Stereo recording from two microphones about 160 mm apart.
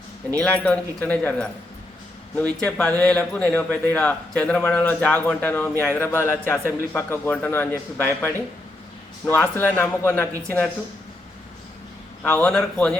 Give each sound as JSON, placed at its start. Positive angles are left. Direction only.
{"t": 0.3, "sound": "a man's voice", "side_deg": 10}
{"t": 12.2, "sound": "speech", "side_deg": 10}